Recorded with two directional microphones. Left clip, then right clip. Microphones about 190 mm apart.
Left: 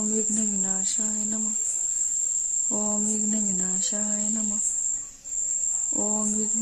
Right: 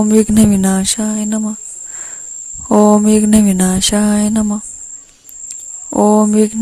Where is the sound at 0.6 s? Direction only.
50° right (ahead or behind).